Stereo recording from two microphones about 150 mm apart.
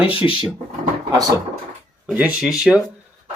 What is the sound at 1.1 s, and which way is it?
Speech, 25° right (ahead or behind).